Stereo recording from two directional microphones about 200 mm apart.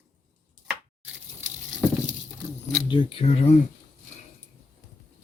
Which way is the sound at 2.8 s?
25° left (ahead or behind).